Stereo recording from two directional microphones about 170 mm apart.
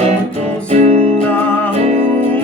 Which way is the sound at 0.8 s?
35° right (ahead or behind).